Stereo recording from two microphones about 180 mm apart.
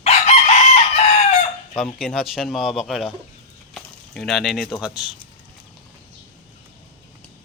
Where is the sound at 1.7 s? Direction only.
Centre (ahead or behind).